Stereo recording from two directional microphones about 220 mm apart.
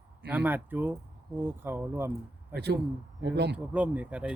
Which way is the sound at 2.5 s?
50° right (ahead or behind).